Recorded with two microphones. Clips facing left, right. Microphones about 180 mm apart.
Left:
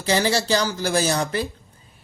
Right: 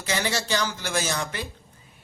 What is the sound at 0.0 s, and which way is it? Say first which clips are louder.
Speech: left 7 dB; 35° left (ahead or behind).